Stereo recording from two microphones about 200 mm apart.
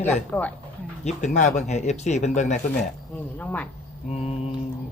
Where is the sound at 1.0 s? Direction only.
35° left (ahead or behind).